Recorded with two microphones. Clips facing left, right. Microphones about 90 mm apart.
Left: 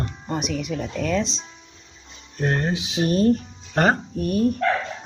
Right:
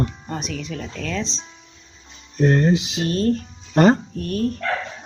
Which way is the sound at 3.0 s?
10° left (ahead or behind).